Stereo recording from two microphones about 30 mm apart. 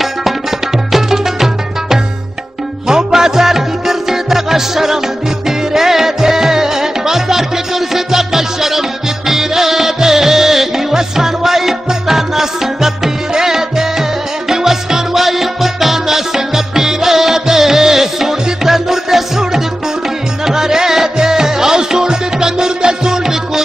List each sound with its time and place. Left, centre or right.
0.9 s music: centre